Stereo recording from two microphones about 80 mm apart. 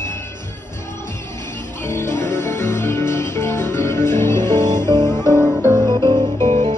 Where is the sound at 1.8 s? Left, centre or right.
Left.